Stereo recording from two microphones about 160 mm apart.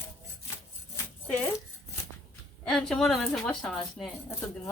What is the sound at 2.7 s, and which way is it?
Speech, 5° left (ahead or behind).